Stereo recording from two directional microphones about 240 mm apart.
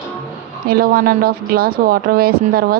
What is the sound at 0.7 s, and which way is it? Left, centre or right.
A woman's voice, right.